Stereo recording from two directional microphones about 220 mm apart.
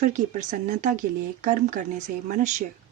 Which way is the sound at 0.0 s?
35° right (ahead or behind).